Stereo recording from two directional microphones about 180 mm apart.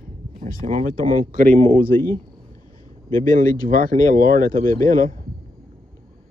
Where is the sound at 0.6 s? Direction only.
45° right (ahead or behind).